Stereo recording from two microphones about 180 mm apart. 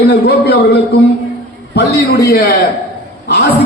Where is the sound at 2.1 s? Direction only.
60° left (ahead or behind).